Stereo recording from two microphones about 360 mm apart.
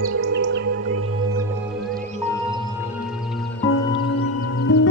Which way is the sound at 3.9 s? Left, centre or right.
Centre.